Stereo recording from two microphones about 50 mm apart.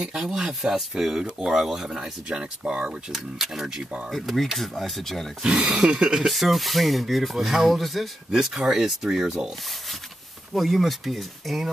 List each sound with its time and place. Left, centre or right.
0.0 s speech: centre
5.4 s speech: centre
6.1 s speech: centre
10.5 s speech: centre